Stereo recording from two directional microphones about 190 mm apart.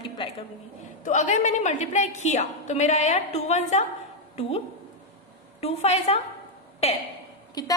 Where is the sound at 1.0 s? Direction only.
40° left (ahead or behind).